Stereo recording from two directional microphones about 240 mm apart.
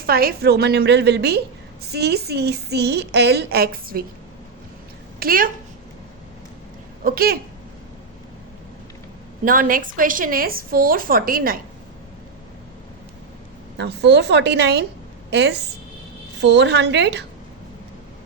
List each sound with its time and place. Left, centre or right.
0.0 s a woman's voice: right
5.2 s a woman's voice: right
7.0 s a woman's voice: right
9.4 s a woman's voice: right
13.7 s a woman's voice: right